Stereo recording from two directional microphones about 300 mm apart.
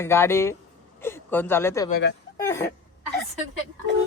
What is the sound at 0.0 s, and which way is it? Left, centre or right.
Speech, centre.